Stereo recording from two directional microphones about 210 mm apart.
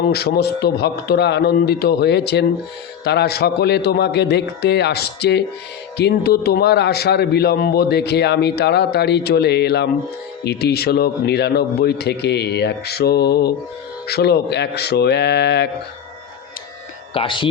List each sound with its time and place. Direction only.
0.1 s a man's voice: 50° left (ahead or behind)
17.2 s speech: 25° left (ahead or behind)